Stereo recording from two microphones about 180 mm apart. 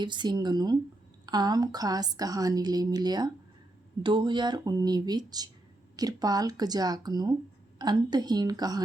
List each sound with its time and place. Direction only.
0.0 s a woman's voice: 25° right (ahead or behind)